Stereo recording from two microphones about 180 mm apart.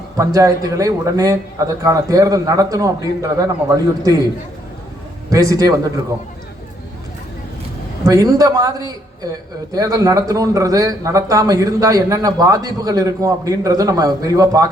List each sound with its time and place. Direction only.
0.3 s a man's voice: 20° right (ahead or behind)
5.3 s a man's voice: 20° right (ahead or behind)
8.0 s a man's voice: 20° right (ahead or behind)